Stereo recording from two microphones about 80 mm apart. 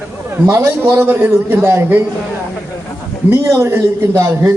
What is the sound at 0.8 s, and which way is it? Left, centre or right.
A man's voice, right.